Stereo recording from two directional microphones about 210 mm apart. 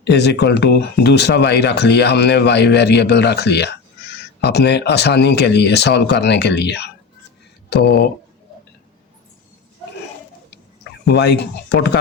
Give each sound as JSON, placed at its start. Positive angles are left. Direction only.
{"t": 0.0, "sound": "speech", "side_deg": 55}
{"t": 11.1, "sound": "speech", "side_deg": 55}